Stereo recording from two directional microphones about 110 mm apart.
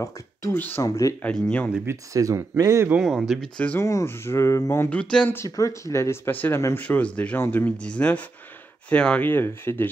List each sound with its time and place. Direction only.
0.0 s speech: 25° left (ahead or behind)
0.6 s speech: 15° left (ahead or behind)
0.8 s speech: 30° left (ahead or behind)
1.2 s speech: 10° left (ahead or behind)
1.9 s speech: 25° right (ahead or behind)
3.0 s speech: centre (ahead or behind)
3.8 s speech: 25° left (ahead or behind)
4.8 s speech: 10° left (ahead or behind)
5.4 s speech: 30° left (ahead or behind)